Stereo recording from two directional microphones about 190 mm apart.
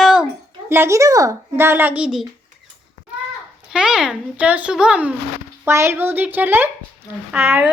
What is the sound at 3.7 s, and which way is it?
A child's voice, 5° right (ahead or behind).